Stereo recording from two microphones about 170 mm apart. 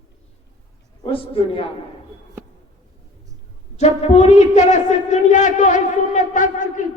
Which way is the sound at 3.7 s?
40° left (ahead or behind).